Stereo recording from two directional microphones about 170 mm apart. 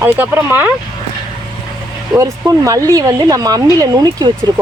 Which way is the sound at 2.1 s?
20° right (ahead or behind).